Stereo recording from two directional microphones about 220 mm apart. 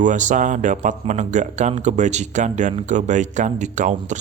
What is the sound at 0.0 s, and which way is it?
Speech, 35° right (ahead or behind).